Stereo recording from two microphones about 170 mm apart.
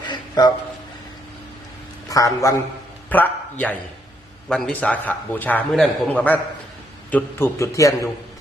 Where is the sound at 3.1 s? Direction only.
10° left (ahead or behind).